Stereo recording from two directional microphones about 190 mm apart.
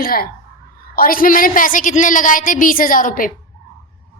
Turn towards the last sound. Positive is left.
turn(degrees=45)  # may be behind; listen again after turning